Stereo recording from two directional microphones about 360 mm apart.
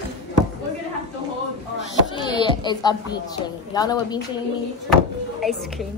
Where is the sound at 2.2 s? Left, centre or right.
Centre.